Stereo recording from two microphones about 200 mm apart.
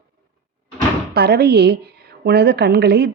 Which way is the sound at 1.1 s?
50° right (ahead or behind).